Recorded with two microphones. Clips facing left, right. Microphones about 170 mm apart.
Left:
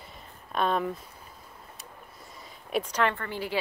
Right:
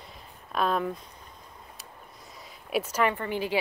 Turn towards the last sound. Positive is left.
turn(degrees=-15)  # may be behind; listen again after turning